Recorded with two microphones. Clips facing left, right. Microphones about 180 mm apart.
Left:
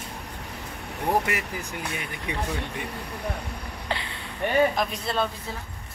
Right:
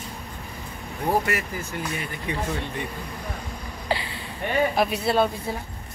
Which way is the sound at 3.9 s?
5° right (ahead or behind).